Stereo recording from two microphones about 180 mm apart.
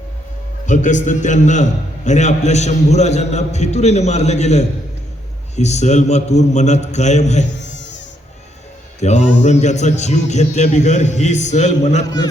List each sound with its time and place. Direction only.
0.6 s a man's voice: 45° left (ahead or behind)
7.4 s insect: 80° left
9.0 s a man's voice: 40° left (ahead or behind)
12.0 s a man's voice: 20° left (ahead or behind)